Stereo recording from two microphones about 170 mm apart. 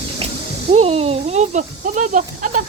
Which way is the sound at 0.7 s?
35° right (ahead or behind).